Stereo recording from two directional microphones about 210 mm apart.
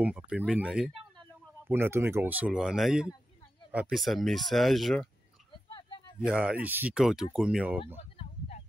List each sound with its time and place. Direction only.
0.0 s speech: 5° right (ahead or behind)
5.7 s vehicle: 20° left (ahead or behind)
6.1 s speech: 5° right (ahead or behind)
8.2 s a sound: 30° left (ahead or behind)